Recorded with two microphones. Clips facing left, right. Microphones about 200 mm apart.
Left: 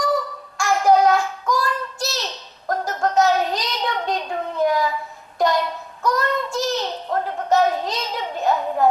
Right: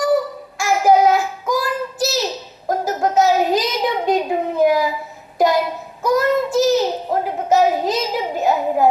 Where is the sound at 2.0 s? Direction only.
5° right (ahead or behind).